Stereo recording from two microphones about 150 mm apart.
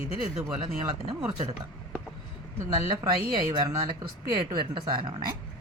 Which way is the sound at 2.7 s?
30° right (ahead or behind).